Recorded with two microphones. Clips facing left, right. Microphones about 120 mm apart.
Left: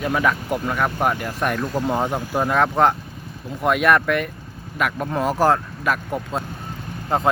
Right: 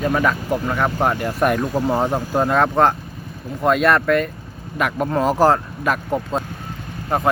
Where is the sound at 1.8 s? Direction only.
10° right (ahead or behind).